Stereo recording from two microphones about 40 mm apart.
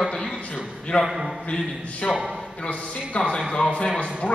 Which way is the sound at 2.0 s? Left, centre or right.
Left.